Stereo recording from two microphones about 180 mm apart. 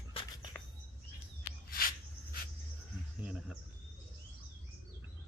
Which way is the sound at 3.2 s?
5° right (ahead or behind).